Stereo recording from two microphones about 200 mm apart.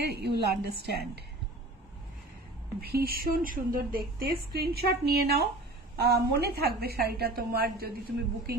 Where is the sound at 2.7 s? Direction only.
50° right (ahead or behind).